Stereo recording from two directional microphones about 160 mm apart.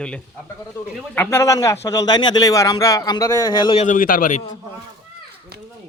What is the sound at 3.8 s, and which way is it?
Speech, 55° left (ahead or behind).